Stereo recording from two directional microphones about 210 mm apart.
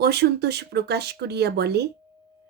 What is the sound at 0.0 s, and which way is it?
Speech, 50° right (ahead or behind).